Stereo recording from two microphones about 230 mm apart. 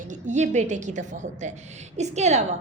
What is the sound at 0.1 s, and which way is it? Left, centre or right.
A woman's voice, right.